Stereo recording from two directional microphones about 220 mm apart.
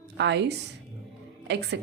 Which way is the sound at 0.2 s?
50° right (ahead or behind).